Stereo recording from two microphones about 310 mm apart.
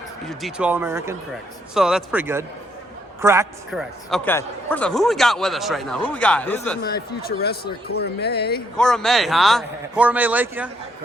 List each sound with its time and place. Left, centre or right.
0.3 s a man's voice: centre
6.8 s speech: left
8.8 s a man's voice: centre